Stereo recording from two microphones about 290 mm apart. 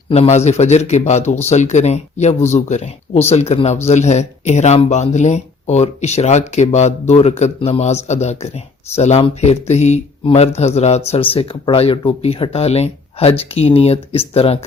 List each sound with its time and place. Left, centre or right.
0.1 s speech: left